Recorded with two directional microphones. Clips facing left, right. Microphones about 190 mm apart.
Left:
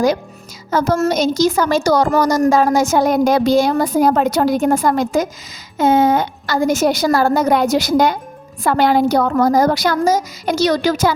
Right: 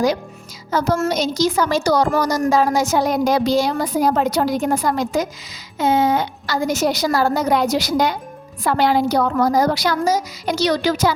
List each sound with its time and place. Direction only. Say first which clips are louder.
0.7 s speech: left 3 dB; 50° left (ahead or behind)